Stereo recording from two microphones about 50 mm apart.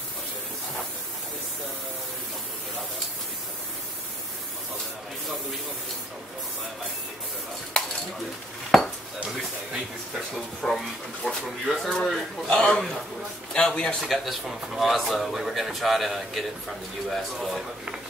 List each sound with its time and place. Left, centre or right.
8.7 s dishes: centre
10.3 s speech: centre
12.4 s a man's voice: centre
14.0 s speech: centre